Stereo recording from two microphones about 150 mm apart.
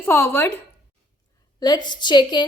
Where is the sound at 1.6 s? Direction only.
30° left (ahead or behind).